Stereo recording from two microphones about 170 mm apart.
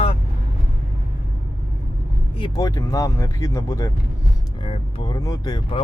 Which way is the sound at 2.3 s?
25° left (ahead or behind).